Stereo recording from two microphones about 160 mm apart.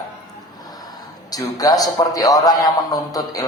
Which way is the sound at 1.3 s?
25° left (ahead or behind).